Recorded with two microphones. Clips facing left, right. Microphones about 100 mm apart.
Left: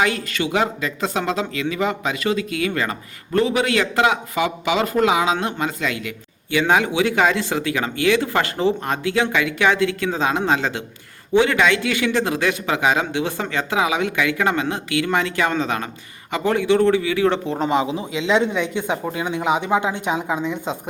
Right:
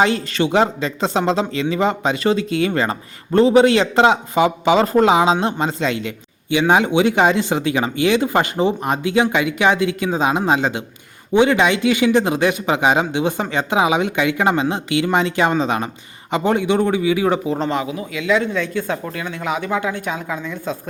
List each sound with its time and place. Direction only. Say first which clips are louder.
0.0 s a man's voice: right 4 dB; 30° right (ahead or behind); by 17.6 s 10° right (ahead or behind)
17.7 s speech: left 2 dB; 20° left (ahead or behind)